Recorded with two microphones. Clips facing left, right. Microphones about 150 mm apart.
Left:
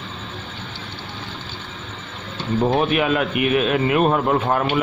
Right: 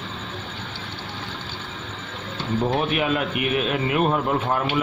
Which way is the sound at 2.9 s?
75° left (ahead or behind).